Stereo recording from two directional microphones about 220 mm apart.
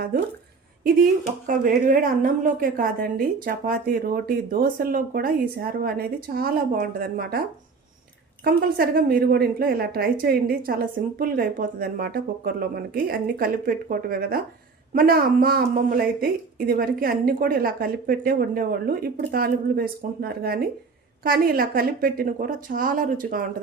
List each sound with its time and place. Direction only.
1.5 s a woman's voice: 40° right (ahead or behind)
8.4 s a woman's voice: 45° right (ahead or behind)